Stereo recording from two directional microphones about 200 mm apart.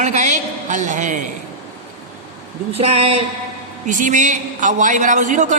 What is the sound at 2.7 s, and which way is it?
A woman's voice, 30° right (ahead or behind).